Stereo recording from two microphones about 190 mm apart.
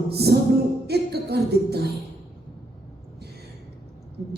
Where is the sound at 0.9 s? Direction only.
60° right (ahead or behind).